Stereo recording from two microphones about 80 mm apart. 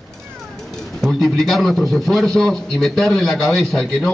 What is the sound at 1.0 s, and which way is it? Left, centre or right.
A man's voice, centre.